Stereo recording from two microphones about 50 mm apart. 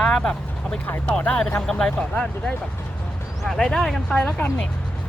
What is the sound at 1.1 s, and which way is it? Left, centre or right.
Speech, centre.